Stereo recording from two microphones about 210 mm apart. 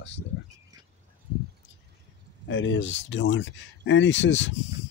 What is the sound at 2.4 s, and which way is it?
Speech, 65° left (ahead or behind).